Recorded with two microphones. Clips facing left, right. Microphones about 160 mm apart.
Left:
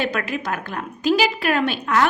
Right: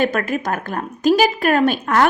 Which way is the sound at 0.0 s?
45° right (ahead or behind).